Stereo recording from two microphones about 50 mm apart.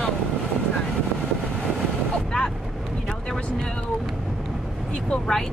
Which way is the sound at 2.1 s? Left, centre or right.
Centre.